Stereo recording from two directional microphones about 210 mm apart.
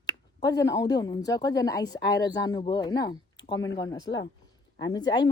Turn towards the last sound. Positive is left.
turn(degrees=20)  # may be behind; listen again after turning